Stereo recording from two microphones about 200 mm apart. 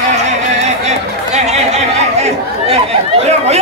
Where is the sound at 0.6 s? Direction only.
35° right (ahead or behind).